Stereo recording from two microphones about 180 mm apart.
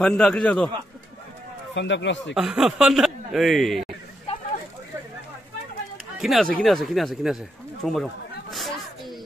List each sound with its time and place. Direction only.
0.0 s speech: 5° left (ahead or behind)
1.7 s speech: 85° left
2.3 s speech: centre (ahead or behind)
6.1 s speech: centre (ahead or behind)
6.6 s a sound: centre (ahead or behind)